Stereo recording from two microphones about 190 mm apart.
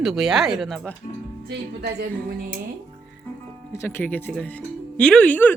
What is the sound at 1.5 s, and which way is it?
Speech, 60° right (ahead or behind).